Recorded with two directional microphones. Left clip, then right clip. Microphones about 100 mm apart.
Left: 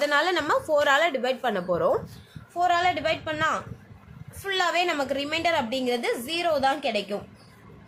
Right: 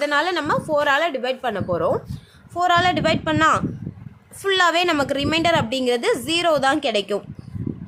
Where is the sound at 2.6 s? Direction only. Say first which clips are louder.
Right 4 dB; 90° right.